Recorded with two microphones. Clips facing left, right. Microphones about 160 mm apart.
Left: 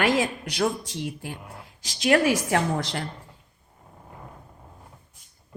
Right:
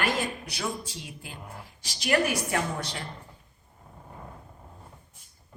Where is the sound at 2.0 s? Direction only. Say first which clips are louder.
Left 5 dB; 80° left.